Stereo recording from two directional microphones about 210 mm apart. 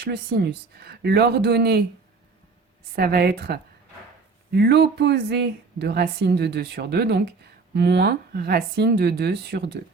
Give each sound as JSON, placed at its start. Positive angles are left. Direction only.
{"t": 0.8, "sound": "speech", "side_deg": -50}
{"t": 2.9, "sound": "speech", "side_deg": -50}